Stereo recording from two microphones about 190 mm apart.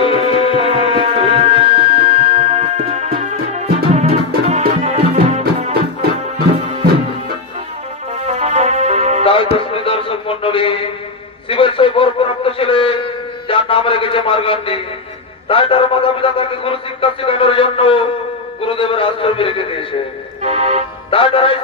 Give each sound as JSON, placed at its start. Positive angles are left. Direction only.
{"t": 0.0, "sound": "music", "side_deg": 30}
{"t": 0.7, "sound": "music", "side_deg": -30}
{"t": 8.3, "sound": "music", "side_deg": -35}
{"t": 9.2, "sound": "music", "side_deg": 30}
{"t": 9.6, "sound": "a sound", "side_deg": 30}
{"t": 13.5, "sound": "a man's voice", "side_deg": 30}
{"t": 20.4, "sound": "music", "side_deg": -35}
{"t": 21.1, "sound": "a man's voice", "side_deg": 30}